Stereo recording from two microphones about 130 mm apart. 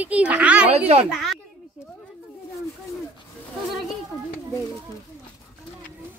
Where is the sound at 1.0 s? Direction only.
5° right (ahead or behind).